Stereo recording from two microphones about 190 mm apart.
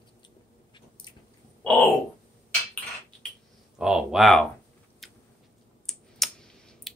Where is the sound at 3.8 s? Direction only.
5° right (ahead or behind).